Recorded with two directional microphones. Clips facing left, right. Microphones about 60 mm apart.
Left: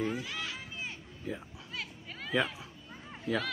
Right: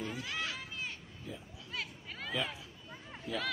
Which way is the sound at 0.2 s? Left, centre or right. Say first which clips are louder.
Even; centre.